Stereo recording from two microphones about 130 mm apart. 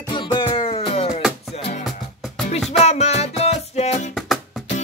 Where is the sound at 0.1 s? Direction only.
35° left (ahead or behind).